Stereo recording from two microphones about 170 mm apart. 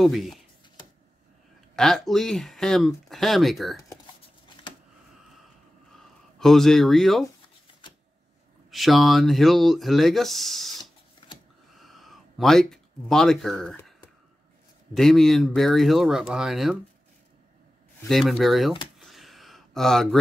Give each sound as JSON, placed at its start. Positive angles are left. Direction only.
{"t": 0.0, "sound": "speech", "side_deg": 0}
{"t": 1.8, "sound": "speech", "side_deg": 0}
{"t": 6.4, "sound": "speech", "side_deg": 0}
{"t": 8.6, "sound": "speech", "side_deg": 0}
{"t": 11.2, "sound": "a sound", "side_deg": 30}
{"t": 11.8, "sound": "a sound", "side_deg": 0}
{"t": 15.0, "sound": "speech", "side_deg": 0}
{"t": 18.0, "sound": "speech", "side_deg": 0}
{"t": 18.9, "sound": "a sound", "side_deg": 0}